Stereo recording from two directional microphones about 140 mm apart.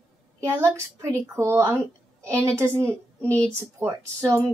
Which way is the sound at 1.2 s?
20° right (ahead or behind).